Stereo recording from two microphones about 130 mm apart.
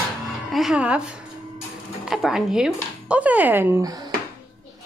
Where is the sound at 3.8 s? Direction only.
30° right (ahead or behind).